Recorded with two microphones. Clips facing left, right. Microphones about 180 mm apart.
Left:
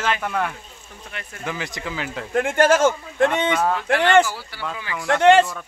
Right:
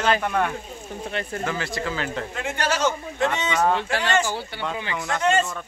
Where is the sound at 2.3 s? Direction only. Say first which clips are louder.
Left 11 dB; 50° left (ahead or behind).